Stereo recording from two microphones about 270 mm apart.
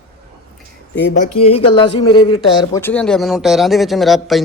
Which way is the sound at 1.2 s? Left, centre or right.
Left.